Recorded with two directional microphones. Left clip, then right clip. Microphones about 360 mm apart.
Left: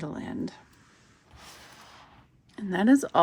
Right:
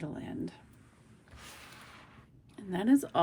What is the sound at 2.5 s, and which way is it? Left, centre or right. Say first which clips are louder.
Speech: left 6 dB; centre.